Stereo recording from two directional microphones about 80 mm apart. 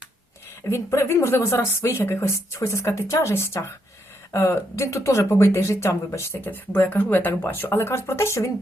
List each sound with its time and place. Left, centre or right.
0.7 s speech: left
6.5 s speech: left